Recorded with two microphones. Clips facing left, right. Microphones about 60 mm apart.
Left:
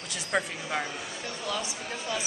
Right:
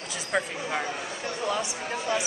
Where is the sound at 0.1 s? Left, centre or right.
Centre.